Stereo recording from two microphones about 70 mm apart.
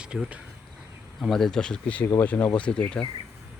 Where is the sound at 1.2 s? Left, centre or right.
Centre.